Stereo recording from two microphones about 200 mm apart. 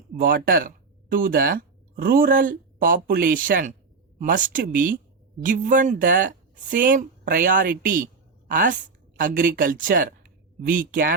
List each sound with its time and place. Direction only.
0.2 s a woman's voice: 45° right (ahead or behind)